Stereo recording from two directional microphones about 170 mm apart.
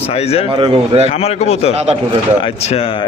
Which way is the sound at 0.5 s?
35° right (ahead or behind).